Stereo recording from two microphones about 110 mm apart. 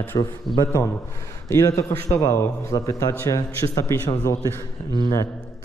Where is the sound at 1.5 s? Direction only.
25° left (ahead or behind).